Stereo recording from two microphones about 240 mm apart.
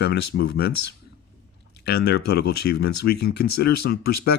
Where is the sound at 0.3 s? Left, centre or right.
Left.